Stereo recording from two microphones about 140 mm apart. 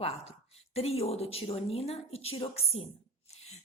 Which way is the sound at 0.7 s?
45° left (ahead or behind).